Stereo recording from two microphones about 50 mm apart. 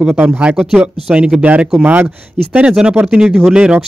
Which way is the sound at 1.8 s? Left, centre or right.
Right.